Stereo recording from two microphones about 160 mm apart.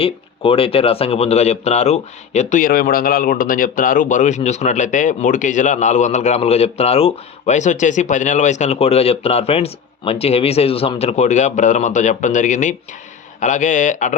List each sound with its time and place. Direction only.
0.0 s speech: 35° left (ahead or behind); by 14.1 s 50° left (ahead or behind)